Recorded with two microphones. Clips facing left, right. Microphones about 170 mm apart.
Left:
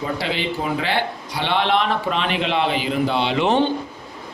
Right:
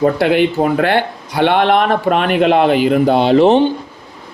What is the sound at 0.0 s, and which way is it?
A man's voice, 55° right (ahead or behind).